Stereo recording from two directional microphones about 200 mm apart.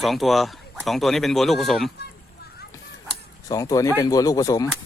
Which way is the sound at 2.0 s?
50° left (ahead or behind).